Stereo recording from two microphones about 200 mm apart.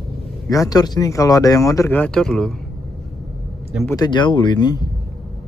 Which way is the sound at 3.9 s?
20° left (ahead or behind).